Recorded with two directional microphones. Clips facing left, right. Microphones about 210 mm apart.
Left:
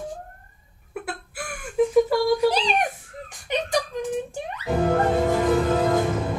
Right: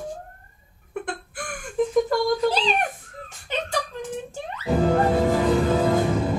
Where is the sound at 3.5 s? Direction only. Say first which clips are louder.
Left 3 dB; 15° left (ahead or behind).